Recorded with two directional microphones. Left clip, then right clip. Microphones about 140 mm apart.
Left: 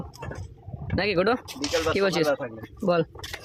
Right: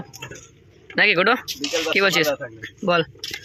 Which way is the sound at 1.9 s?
5° left (ahead or behind).